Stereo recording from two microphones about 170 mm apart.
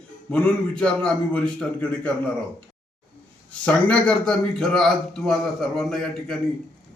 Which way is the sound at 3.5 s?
5° left (ahead or behind).